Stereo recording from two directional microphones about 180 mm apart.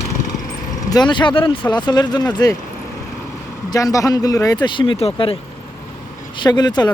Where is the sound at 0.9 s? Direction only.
25° left (ahead or behind).